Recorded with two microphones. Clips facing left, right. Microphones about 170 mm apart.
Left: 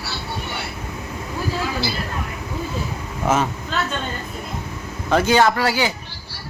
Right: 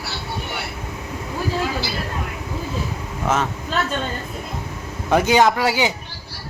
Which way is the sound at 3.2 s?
5° left (ahead or behind).